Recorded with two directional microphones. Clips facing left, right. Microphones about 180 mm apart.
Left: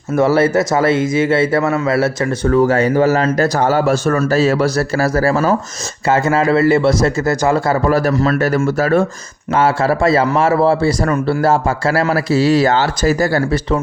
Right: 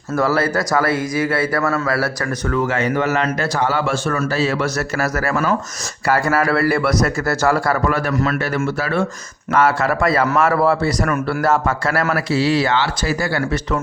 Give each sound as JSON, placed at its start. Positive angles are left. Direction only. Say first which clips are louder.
{"t": 0.2, "sound": "a man's voice", "louder": "left 6 dB", "side_deg": 25}
{"t": 2.5, "sound": "a man's voice", "louder": "left 7 dB", "side_deg": 35}
{"t": 7.9, "sound": "a man's voice", "louder": "left 5 dB", "side_deg": 35}
{"t": 9.6, "sound": "a man's voice", "louder": "left 3 dB", "side_deg": 30}